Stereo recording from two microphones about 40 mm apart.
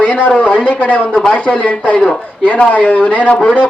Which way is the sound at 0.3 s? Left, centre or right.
Left.